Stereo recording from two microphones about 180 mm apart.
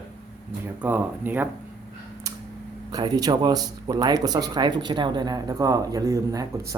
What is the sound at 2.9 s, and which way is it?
Speech, 20° right (ahead or behind).